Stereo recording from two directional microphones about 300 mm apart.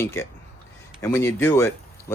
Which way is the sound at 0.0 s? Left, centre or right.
Centre.